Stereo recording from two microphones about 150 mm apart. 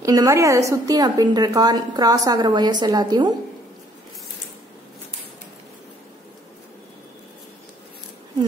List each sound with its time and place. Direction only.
0.0 s a woman's voice: 20° right (ahead or behind)